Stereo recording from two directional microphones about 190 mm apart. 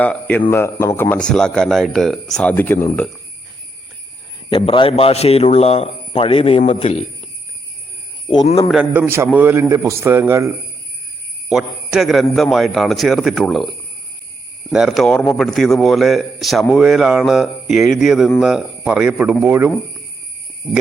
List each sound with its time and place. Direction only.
0.0 s speech: 10° left (ahead or behind)
4.4 s a man's voice: 25° left (ahead or behind)
8.7 s a man's voice: 10° right (ahead or behind)
11.5 s a man's voice: centre (ahead or behind)
14.7 s a man's voice: centre (ahead or behind)